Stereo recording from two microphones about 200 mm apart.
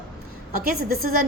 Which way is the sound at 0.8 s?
45° right (ahead or behind).